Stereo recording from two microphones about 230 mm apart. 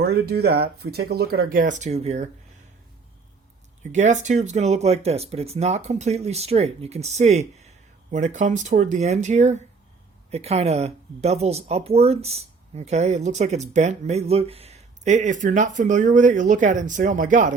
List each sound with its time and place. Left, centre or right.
0.0 s speech: right
3.9 s speech: right